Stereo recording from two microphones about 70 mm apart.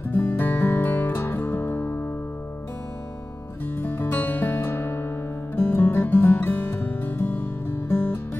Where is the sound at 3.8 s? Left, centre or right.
Left.